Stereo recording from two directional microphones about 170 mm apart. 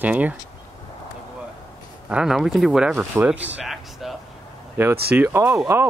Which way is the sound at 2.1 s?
5° right (ahead or behind).